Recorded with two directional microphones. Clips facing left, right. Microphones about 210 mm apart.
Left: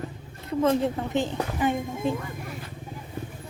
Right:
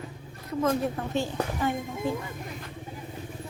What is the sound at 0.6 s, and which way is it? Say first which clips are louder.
A woman's voice: left 3 dB; 25° left (ahead or behind).